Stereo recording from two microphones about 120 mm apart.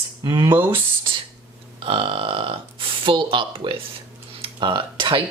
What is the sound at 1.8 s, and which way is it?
Speech, 45° right (ahead or behind).